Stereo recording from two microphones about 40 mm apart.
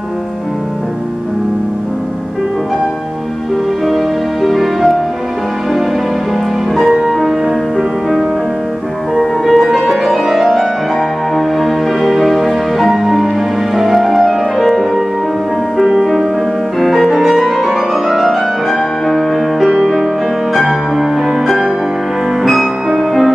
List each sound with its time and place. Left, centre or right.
3.8 s music: centre
6.9 s music: centre
9.2 s music: centre